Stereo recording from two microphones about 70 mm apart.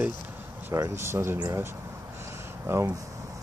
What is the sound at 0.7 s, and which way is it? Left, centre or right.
Speech, right.